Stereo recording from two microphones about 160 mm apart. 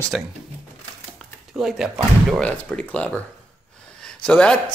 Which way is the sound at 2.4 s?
5° left (ahead or behind).